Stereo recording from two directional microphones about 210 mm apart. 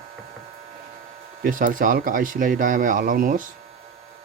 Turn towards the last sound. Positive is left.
turn(degrees=-40)  # may be behind; listen again after turning